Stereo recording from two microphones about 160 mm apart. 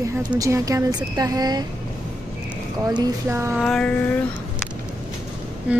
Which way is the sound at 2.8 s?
25° right (ahead or behind).